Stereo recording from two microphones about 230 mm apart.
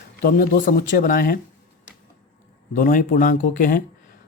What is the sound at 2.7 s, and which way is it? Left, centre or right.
Speech, left.